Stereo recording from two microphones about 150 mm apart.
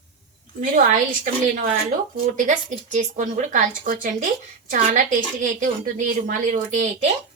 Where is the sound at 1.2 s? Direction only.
60° right (ahead or behind).